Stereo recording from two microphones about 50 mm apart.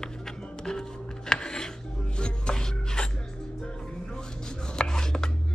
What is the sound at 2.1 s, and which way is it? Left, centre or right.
Chopping, centre.